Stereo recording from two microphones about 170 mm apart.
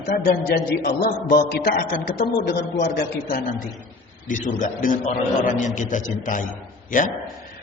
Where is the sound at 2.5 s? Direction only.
85° left.